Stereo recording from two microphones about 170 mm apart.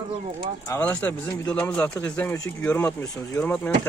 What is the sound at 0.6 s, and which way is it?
Speech, 15° left (ahead or behind).